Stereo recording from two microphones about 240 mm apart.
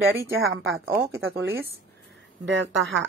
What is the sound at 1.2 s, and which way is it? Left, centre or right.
Speech, right.